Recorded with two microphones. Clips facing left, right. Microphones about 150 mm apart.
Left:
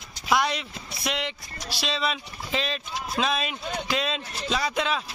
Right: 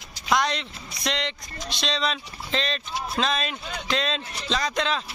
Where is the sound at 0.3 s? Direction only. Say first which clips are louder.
Even; 10° left (ahead or behind).